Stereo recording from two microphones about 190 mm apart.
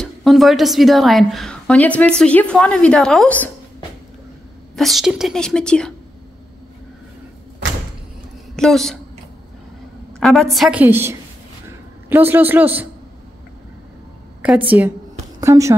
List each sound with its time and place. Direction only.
0.0 s a woman's voice: centre (ahead or behind)
4.7 s a woman's voice: centre (ahead or behind)
8.5 s a woman's voice: centre (ahead or behind)
10.2 s a woman's voice: centre (ahead or behind)
14.4 s a man's voice: 5° right (ahead or behind)